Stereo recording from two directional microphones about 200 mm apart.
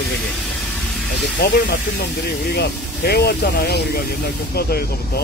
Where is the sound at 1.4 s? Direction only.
50° left (ahead or behind).